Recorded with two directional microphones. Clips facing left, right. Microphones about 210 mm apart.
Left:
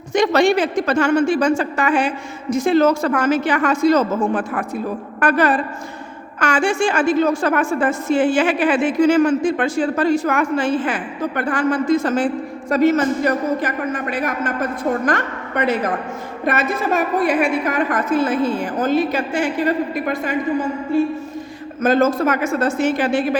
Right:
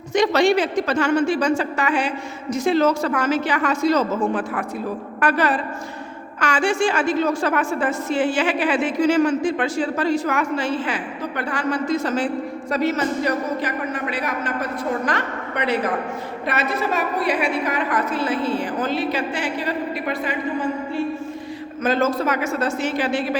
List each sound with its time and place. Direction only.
0.1 s a woman's voice: 50° left (ahead or behind)